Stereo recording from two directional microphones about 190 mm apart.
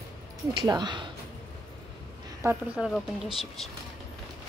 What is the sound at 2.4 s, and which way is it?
Speech, 10° right (ahead or behind).